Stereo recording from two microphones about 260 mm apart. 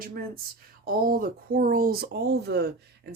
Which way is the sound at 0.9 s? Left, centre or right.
Right.